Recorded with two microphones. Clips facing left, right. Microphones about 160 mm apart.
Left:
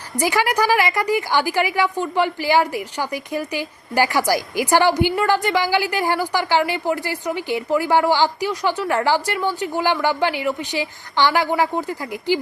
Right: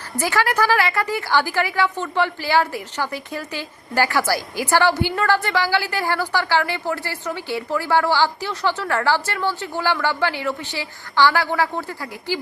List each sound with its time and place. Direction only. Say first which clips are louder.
0.2 s a woman's voice: left 1 dB; 15° left (ahead or behind)